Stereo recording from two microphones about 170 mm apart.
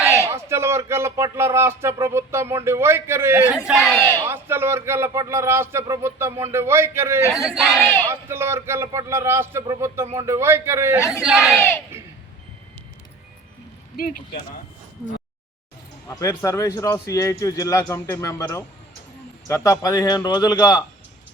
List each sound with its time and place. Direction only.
0.0 s speech: 15° right (ahead or behind)
3.7 s speech: centre (ahead or behind)
4.3 s speech: 15° right (ahead or behind)
7.4 s speech: centre (ahead or behind)
8.1 s speech: 15° right (ahead or behind)
11.2 s speech: 5° right (ahead or behind)
13.9 s speech: 55° left (ahead or behind)
16.0 s speech: 20° left (ahead or behind)